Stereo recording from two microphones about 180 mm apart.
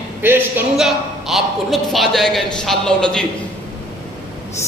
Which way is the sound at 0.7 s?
Centre (ahead or behind).